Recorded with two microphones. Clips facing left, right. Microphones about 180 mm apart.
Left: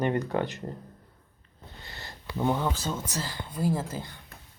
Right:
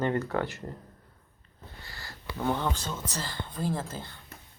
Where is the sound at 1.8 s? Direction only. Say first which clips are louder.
Left 2 dB; 20° left (ahead or behind).